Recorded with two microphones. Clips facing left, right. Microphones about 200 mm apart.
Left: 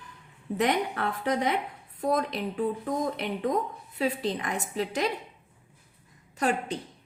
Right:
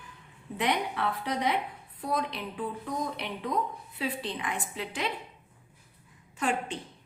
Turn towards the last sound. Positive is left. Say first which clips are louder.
# left 3 dB
turn(degrees=40)  # may be behind; listen again after turning